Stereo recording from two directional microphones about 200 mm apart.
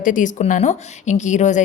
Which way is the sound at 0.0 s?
40° left (ahead or behind).